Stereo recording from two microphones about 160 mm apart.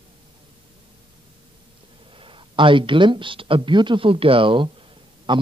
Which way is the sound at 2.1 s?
35° right (ahead or behind).